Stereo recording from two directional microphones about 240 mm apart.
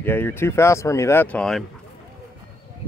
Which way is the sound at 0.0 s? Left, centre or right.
Centre.